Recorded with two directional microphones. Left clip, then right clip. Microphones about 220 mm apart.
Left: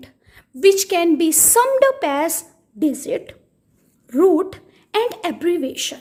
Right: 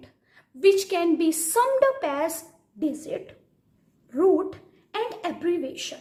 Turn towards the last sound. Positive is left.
turn(degrees=40)  # may be behind; listen again after turning